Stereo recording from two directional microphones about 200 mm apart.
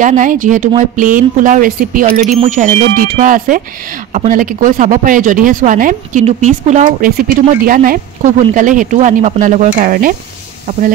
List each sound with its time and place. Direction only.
0.0 s speech: 40° right (ahead or behind)